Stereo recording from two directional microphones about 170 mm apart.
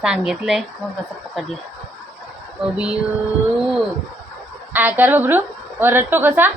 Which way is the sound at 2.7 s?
5° right (ahead or behind).